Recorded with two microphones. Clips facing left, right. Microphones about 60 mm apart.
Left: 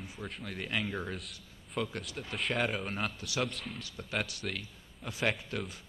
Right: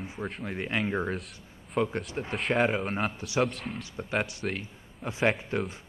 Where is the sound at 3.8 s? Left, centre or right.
Right.